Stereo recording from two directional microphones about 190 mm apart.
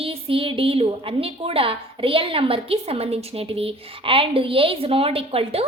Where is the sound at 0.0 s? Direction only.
30° right (ahead or behind).